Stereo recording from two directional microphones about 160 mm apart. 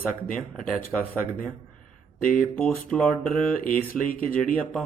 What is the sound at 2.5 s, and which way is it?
Speech, 5° left (ahead or behind).